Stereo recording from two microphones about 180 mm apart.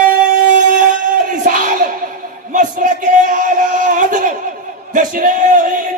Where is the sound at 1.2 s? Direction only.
45° right (ahead or behind).